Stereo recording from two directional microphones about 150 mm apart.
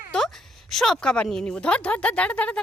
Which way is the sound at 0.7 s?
Centre (ahead or behind).